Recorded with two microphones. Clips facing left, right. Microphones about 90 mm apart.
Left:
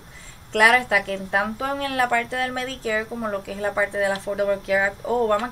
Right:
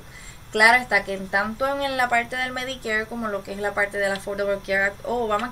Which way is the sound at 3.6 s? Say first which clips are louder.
Left 2 dB; 5° right (ahead or behind).